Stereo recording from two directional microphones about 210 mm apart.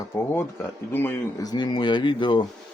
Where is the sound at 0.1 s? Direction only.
10° left (ahead or behind).